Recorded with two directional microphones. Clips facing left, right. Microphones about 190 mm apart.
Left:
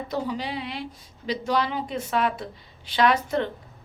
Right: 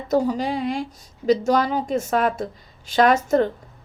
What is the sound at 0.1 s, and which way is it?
Speech, 45° right (ahead or behind).